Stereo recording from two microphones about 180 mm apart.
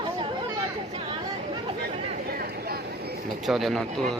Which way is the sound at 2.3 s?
60° right (ahead or behind).